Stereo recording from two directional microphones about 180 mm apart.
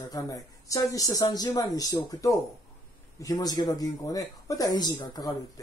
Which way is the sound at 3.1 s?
20° left (ahead or behind).